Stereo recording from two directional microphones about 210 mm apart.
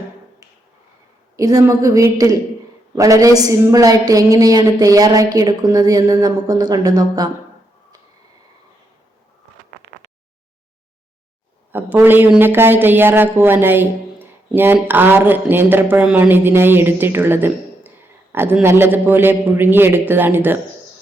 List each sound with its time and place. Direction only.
1.4 s a man's voice: 15° right (ahead or behind)
11.7 s a man's voice: 10° right (ahead or behind)